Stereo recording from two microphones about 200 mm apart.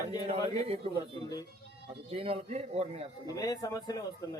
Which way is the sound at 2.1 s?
30° right (ahead or behind).